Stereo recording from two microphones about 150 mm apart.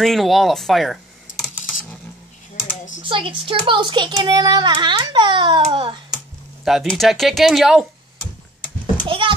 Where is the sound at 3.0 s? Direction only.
35° right (ahead or behind).